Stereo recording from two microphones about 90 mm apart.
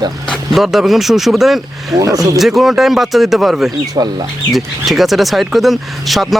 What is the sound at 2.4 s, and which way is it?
Speech, centre (ahead or behind).